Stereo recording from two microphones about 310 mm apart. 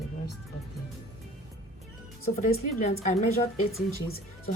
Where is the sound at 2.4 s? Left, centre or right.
Left.